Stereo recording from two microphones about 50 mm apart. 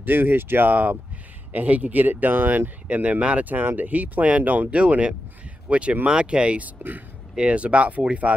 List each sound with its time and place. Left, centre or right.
0.0 s speech: right
3.4 s speech: right